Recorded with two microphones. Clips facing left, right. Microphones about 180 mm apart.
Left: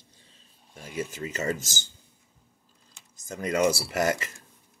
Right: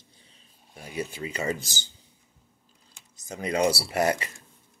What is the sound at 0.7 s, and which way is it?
Speech, 45° left (ahead or behind).